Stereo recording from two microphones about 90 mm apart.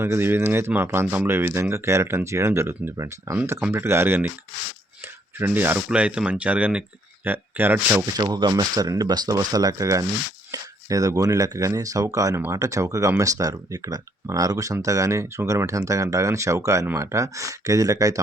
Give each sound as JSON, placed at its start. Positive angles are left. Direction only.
{"t": 0.0, "sound": "speech", "side_deg": -25}
{"t": 5.4, "sound": "speech", "side_deg": -20}
{"t": 8.2, "sound": "speech", "side_deg": -55}